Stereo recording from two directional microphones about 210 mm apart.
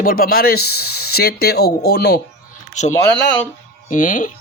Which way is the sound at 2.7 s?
35° left (ahead or behind).